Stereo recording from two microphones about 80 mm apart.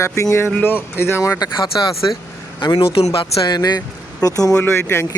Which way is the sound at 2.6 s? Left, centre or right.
Left.